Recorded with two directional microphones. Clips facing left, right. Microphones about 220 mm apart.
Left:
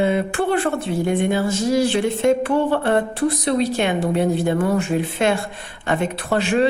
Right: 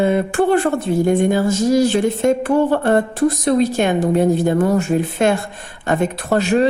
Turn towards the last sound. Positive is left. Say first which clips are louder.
# right 3 dB
turn(degrees=-40)  # may be behind; listen again after turning